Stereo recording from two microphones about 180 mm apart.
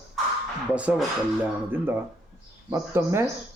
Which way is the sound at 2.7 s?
15° right (ahead or behind).